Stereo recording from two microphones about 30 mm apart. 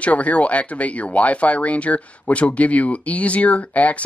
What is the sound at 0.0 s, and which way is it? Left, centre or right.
Speech, left.